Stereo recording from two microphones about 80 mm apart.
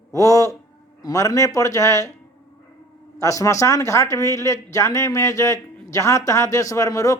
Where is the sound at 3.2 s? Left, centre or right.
Left.